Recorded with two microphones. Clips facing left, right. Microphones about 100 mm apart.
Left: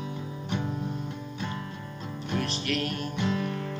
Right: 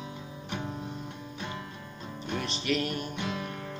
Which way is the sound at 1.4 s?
15° right (ahead or behind).